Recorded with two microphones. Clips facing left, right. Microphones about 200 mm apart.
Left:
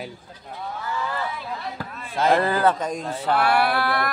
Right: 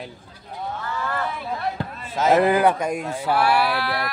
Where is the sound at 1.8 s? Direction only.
25° right (ahead or behind); by 3.6 s 10° right (ahead or behind).